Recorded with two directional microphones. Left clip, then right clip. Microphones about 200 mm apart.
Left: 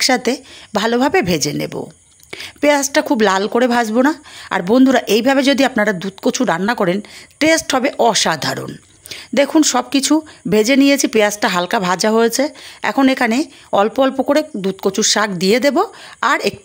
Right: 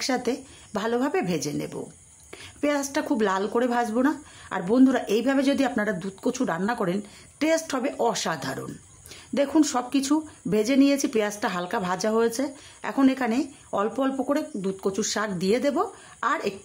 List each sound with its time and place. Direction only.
0.0 s a woman's voice: 35° left (ahead or behind)